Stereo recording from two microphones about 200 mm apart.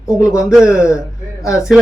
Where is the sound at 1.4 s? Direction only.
15° left (ahead or behind).